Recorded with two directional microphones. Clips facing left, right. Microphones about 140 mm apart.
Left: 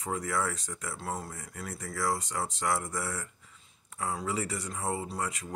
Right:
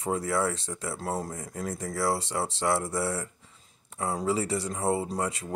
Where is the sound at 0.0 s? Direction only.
30° right (ahead or behind).